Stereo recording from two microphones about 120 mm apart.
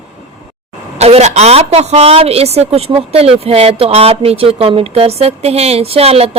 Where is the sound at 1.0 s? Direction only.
65° right (ahead or behind).